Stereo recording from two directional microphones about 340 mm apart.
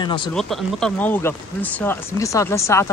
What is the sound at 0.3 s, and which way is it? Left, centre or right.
Speech, centre.